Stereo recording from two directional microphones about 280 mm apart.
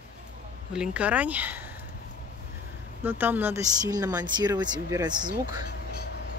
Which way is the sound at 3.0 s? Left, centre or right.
Centre.